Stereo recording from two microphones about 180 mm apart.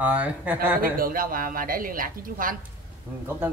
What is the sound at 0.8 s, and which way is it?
Speech, 55° right (ahead or behind).